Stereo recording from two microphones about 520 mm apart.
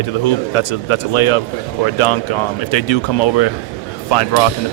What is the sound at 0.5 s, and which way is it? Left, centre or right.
Speech, left.